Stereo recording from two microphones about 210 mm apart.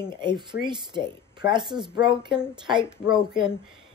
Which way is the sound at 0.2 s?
20° right (ahead or behind).